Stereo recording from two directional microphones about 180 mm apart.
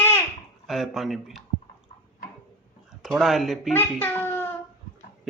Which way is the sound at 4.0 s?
10° left (ahead or behind).